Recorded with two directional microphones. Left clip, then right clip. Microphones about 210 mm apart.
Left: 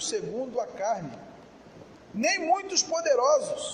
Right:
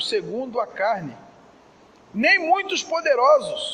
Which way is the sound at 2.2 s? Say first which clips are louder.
Right 7 dB; 30° right (ahead or behind).